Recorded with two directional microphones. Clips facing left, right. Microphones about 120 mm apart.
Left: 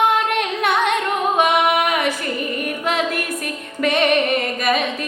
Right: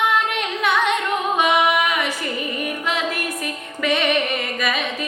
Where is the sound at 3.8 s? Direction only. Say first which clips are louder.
Left 3 dB; 50° left (ahead or behind).